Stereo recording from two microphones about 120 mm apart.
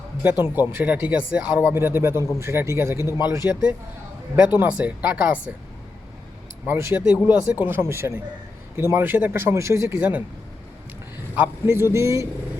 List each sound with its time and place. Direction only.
0.2 s speech: 15° right (ahead or behind)
3.0 s speech: 30° left (ahead or behind)
3.2 s speech: 20° right (ahead or behind)
6.7 s speech: 20° right (ahead or behind)
10.0 s speech: 10° right (ahead or behind)
11.3 s speech: 20° right (ahead or behind)